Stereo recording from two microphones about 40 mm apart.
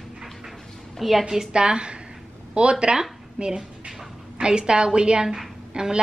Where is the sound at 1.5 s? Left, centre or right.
Right.